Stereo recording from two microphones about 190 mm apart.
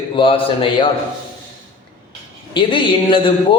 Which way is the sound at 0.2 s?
25° left (ahead or behind).